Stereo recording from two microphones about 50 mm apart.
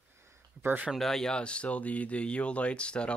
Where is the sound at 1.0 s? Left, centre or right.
Centre.